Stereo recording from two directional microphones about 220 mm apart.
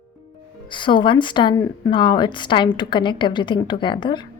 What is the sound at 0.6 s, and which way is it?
A woman's voice, 20° left (ahead or behind).